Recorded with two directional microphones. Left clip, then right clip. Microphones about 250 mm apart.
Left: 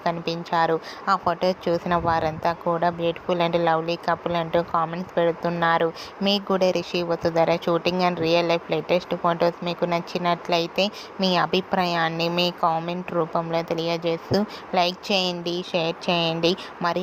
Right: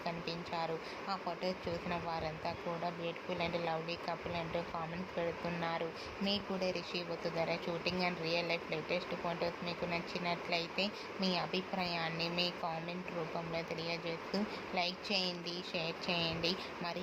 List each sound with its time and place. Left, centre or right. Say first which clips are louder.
0.0 s speech: left 14 dB; left